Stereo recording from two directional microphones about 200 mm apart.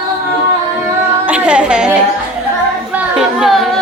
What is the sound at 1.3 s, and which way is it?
Speech, 5° right (ahead or behind).